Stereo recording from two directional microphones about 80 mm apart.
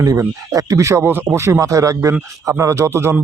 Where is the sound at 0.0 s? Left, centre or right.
Right.